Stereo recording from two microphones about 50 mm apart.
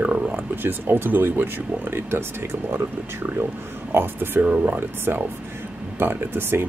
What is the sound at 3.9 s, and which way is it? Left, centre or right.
Speech, right.